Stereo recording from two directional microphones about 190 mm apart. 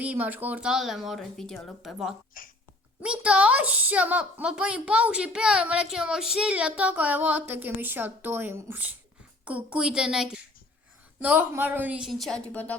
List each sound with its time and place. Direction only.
0.0 s speech: 10° right (ahead or behind)
2.4 s speech: 45° left (ahead or behind)
3.0 s a woman's voice: 5° right (ahead or behind)